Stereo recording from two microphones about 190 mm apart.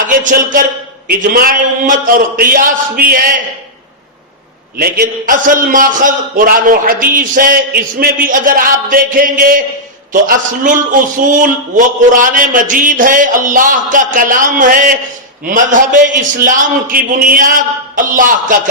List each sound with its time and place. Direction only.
0.2 s a man's voice: 45° right (ahead or behind)
4.8 s a man's voice: 55° right (ahead or behind)